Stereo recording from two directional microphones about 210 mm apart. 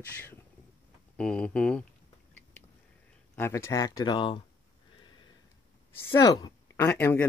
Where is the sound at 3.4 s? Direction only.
15° left (ahead or behind).